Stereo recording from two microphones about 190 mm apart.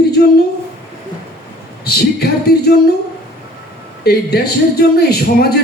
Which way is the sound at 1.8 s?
55° left (ahead or behind).